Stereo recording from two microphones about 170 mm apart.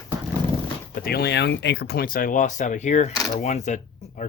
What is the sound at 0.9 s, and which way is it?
Speech, 60° left (ahead or behind).